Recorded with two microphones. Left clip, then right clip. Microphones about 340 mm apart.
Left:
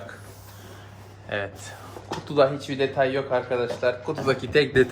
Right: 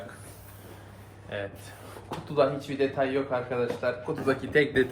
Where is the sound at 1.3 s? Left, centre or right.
Left.